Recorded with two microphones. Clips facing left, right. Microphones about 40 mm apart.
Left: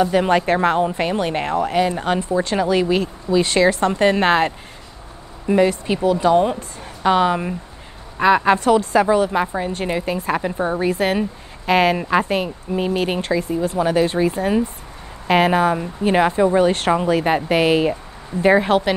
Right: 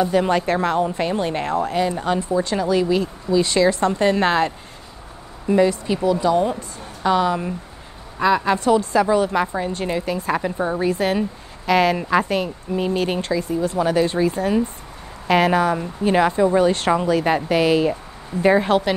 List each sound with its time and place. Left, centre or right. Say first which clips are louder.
0.1 s speech: left 2 dB; centre
9.4 s speech: left 1 dB; centre
10.9 s speech: left 1 dB; left